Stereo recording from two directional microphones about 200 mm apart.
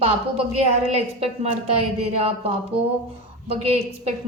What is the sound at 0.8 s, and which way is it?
A woman's voice, 30° right (ahead or behind).